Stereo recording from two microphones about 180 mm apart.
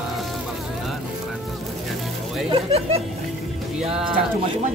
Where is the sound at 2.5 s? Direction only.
35° right (ahead or behind).